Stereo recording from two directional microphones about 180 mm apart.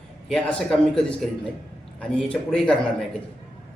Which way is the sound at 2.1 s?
5° left (ahead or behind).